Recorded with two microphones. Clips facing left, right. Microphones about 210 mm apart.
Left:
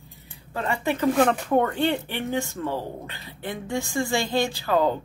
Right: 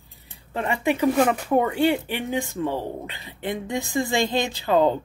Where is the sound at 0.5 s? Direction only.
15° right (ahead or behind).